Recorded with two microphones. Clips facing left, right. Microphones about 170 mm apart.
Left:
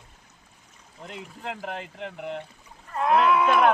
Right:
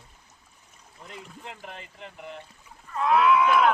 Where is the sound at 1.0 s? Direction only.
90° left.